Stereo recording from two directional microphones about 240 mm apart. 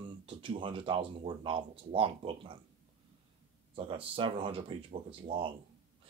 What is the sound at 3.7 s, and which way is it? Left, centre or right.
Speech, right.